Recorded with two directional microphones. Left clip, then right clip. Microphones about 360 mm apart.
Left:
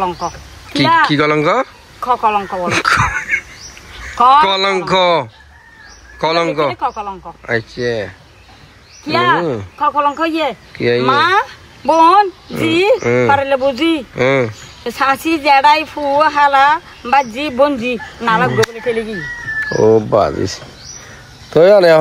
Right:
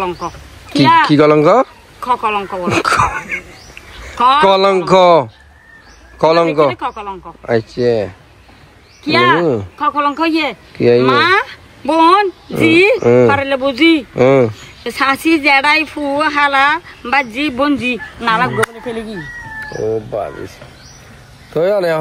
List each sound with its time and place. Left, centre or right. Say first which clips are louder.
0.0 s speech: left 2 dB; centre
4.2 s speech: even; centre
21.5 s speech: left 6 dB; left